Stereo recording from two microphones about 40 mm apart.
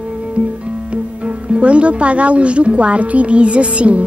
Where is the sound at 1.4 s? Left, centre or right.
Right.